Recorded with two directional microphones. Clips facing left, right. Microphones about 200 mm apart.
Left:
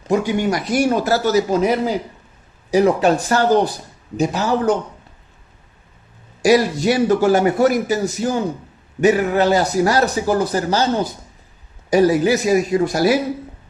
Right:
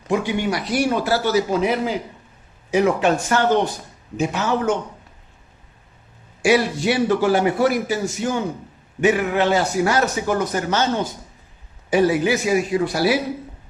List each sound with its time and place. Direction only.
0.1 s a man's voice: 45° left (ahead or behind)
6.4 s a man's voice: 40° left (ahead or behind)